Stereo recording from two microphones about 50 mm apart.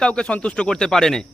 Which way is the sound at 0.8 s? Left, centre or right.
Centre.